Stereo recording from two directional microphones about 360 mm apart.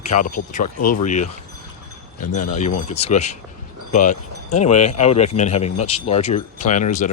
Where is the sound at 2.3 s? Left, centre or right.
Centre.